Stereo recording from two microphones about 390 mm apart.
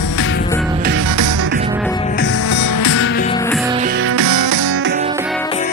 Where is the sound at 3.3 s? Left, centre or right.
Centre.